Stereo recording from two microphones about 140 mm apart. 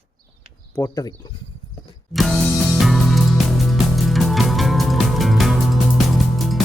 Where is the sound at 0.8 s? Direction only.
25° left (ahead or behind).